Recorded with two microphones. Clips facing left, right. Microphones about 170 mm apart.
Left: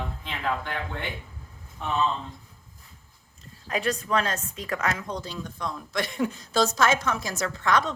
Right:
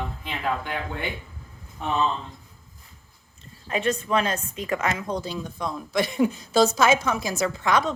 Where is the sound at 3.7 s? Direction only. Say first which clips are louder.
Right 2 dB; centre (ahead or behind).